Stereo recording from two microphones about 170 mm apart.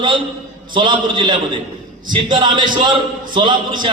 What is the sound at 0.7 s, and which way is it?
A man's voice, 30° right (ahead or behind).